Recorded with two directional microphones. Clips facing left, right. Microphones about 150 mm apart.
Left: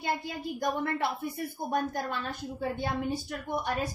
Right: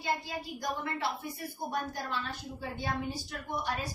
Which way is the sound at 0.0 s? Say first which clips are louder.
Left 2 dB; 55° left (ahead or behind).